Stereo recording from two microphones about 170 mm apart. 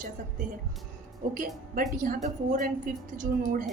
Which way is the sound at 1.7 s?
55° right (ahead or behind).